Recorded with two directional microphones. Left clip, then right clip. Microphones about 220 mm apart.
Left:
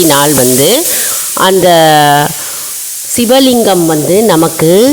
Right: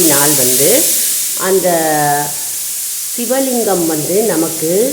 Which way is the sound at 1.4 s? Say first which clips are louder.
Left 8 dB; 50° left (ahead or behind).